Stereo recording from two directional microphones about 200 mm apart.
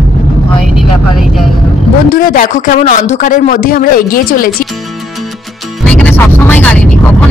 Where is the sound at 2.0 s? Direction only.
45° left (ahead or behind).